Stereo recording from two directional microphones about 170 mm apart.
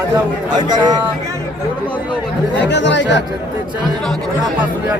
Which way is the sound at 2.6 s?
90° left.